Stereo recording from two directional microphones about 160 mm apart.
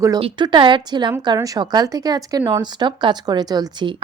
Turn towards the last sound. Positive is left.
turn(degrees=-25)  # may be behind; listen again after turning